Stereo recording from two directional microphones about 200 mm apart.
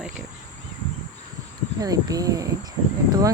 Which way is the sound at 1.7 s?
20° right (ahead or behind).